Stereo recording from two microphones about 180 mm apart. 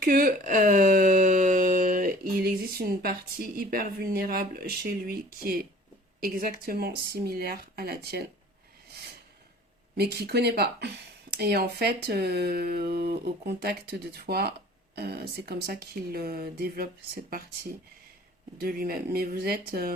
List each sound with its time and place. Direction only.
0.0 s a sound: 50° right (ahead or behind)
6.1 s speech: 55° right (ahead or behind)
10.0 s speech: 65° right (ahead or behind)